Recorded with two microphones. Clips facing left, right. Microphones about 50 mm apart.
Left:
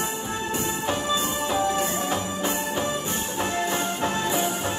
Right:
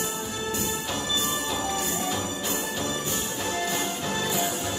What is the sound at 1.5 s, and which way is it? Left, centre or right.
Music, left.